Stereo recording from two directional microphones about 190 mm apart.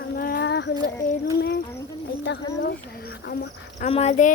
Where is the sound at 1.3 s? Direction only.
60° left (ahead or behind).